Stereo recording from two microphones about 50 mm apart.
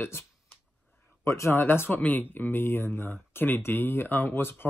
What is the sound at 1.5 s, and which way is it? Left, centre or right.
Speech, left.